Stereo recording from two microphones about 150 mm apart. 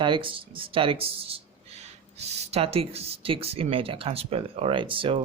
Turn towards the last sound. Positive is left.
turn(degrees=-35)  # may be behind; listen again after turning